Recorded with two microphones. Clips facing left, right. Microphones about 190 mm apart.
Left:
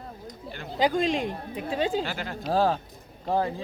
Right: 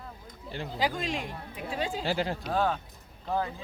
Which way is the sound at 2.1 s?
30° right (ahead or behind).